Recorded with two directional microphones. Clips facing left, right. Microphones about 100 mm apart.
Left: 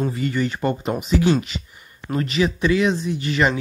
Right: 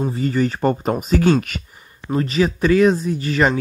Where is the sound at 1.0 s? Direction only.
50° right (ahead or behind).